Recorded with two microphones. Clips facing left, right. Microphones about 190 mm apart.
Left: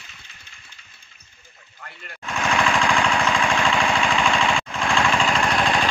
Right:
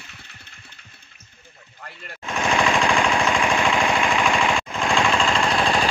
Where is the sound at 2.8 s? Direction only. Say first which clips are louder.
Right 1 dB; 15° right (ahead or behind).